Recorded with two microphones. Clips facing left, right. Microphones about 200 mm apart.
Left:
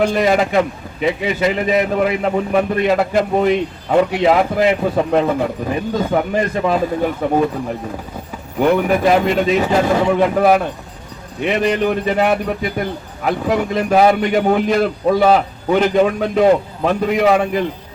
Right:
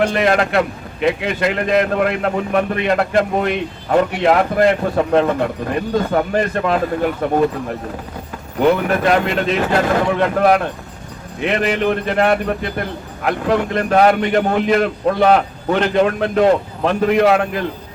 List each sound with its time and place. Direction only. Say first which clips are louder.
0.0 s a man's voice: left 1 dB; 5° left (ahead or behind)
8.5 s a man's voice: left 1 dB; 5° left (ahead or behind)